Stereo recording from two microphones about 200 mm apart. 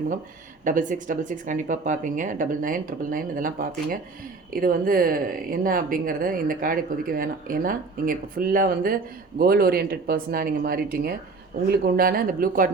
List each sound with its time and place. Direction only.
0.6 s speech: 40° right (ahead or behind)